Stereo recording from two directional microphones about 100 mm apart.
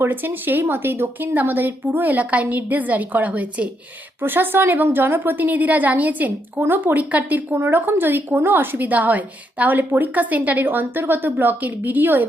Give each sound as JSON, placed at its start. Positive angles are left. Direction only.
{"t": 0.0, "sound": "a woman's voice", "side_deg": -20}